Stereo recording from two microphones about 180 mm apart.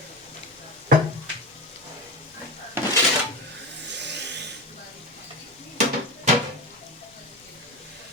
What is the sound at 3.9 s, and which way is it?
Vehicle, 75° right (ahead or behind).